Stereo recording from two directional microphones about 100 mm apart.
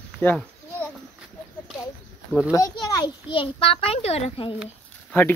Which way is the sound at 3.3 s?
65° left (ahead or behind).